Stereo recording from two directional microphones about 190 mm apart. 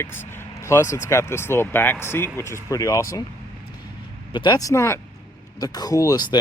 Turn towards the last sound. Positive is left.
turn(degrees=20)  # may be behind; listen again after turning